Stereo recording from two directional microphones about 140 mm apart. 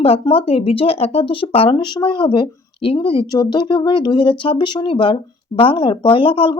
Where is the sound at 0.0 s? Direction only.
40° left (ahead or behind).